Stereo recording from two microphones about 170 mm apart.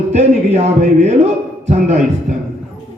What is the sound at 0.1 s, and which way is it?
Speech, 45° right (ahead or behind).